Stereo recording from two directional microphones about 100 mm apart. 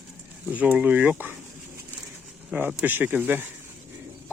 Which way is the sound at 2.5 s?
15° right (ahead or behind).